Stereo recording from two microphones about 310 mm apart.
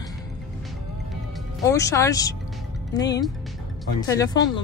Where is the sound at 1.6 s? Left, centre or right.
Centre.